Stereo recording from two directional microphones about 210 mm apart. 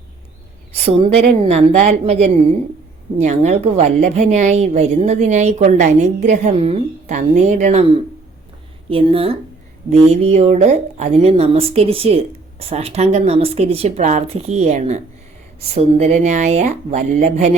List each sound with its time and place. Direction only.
0.7 s a woman's voice: 30° right (ahead or behind)